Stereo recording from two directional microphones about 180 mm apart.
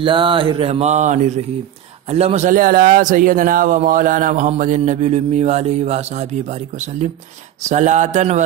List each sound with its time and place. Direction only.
0.0 s mantra: 30° right (ahead or behind)
2.0 s a man's voice: 35° right (ahead or behind)
7.7 s mantra: 40° right (ahead or behind)